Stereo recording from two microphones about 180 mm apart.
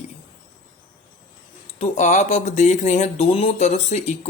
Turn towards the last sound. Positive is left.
turn(degrees=40)  # may be behind; listen again after turning